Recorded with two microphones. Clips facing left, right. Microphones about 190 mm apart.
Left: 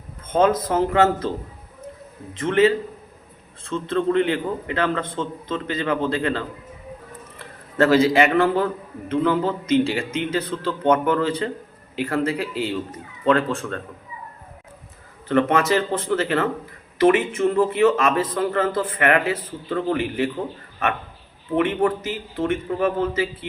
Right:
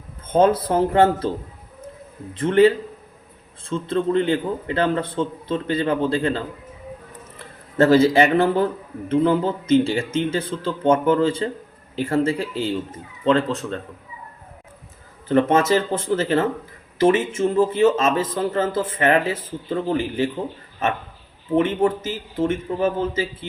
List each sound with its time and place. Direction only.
0.3 s a man's voice: 30° right (ahead or behind)
2.4 s a man's voice: 30° right (ahead or behind)
7.8 s speech: 30° right (ahead or behind)
15.3 s speech: 30° right (ahead or behind)
21.5 s speech: 25° right (ahead or behind)